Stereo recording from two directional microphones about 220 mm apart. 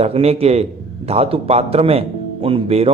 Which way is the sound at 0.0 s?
25° right (ahead or behind).